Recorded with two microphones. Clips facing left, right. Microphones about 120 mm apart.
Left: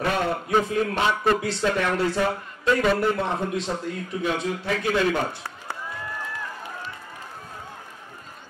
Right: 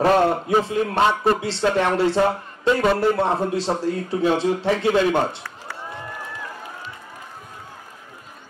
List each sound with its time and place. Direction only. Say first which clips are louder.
0.0 s a man's voice: right 8 dB; 35° right (ahead or behind)